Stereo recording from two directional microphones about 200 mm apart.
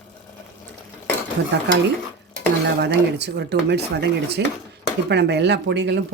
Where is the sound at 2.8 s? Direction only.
55° right (ahead or behind).